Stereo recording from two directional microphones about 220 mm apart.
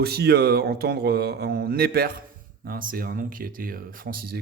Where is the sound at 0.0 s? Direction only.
45° right (ahead or behind).